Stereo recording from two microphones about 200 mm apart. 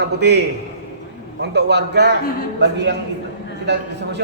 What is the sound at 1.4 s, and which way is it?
A man's voice, 55° right (ahead or behind).